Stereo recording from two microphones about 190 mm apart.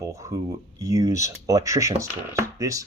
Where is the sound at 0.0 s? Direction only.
15° right (ahead or behind).